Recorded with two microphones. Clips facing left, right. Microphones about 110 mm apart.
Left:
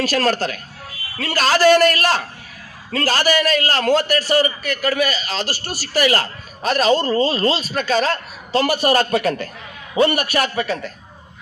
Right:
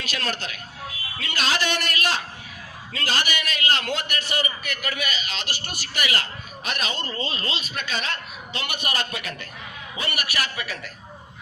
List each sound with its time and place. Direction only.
0.0 s a man's voice: 40° left (ahead or behind)